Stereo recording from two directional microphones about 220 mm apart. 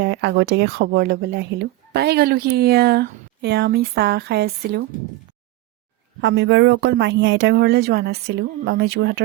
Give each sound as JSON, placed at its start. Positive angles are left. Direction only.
{"t": 0.0, "sound": "speech", "side_deg": -50}
{"t": 6.2, "sound": "speech", "side_deg": -55}